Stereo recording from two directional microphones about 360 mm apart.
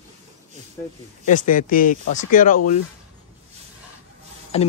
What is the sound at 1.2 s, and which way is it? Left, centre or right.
Speech, left.